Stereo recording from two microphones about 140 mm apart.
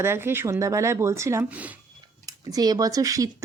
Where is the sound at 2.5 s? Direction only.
25° right (ahead or behind).